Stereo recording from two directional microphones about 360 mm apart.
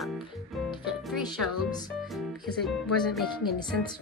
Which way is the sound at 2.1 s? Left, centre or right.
Centre.